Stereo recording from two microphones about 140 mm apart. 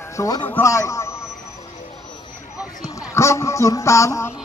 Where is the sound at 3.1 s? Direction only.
20° left (ahead or behind).